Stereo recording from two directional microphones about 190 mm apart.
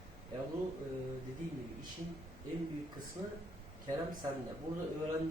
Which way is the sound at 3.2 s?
20° right (ahead or behind).